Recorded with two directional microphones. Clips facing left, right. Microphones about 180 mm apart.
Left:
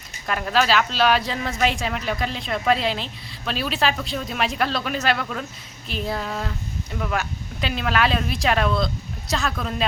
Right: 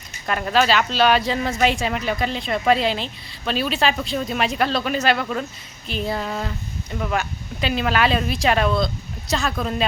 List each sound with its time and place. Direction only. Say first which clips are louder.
0.3 s speech: right 2 dB; centre (ahead or behind)